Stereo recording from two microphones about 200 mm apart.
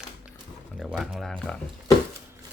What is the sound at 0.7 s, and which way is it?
Speech, centre (ahead or behind).